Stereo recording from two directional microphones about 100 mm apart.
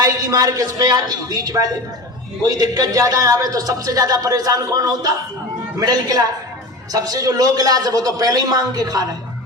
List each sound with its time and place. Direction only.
0.0 s speech: 40° right (ahead or behind)